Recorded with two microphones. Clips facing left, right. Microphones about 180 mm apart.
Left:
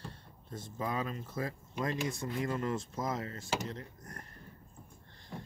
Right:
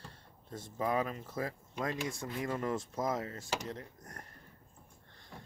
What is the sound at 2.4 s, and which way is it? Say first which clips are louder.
Speech: even; 20° right (ahead or behind).